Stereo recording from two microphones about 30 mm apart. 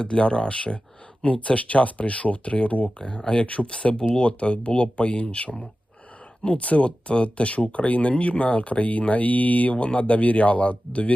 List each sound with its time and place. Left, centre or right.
0.0 s speech: left
3.0 s speech: left
3.2 s speech: left
9.7 s speech: left